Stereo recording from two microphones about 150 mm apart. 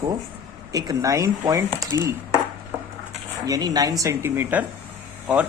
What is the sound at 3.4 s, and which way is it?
Speech, 25° right (ahead or behind).